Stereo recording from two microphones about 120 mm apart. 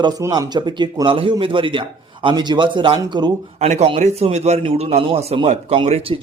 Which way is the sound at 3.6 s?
70° right (ahead or behind).